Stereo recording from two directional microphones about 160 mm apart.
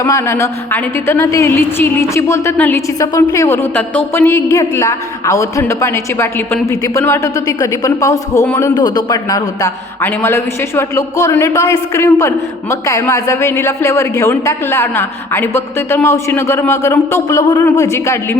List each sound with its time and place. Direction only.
0.0 s a woman's voice: 20° left (ahead or behind)
8.7 s a woman's voice: 25° left (ahead or behind)